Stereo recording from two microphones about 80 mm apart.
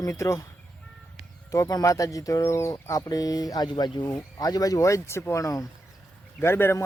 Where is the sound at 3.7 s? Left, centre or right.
Left.